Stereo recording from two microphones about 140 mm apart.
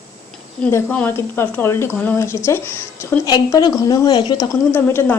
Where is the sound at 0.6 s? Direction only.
10° left (ahead or behind).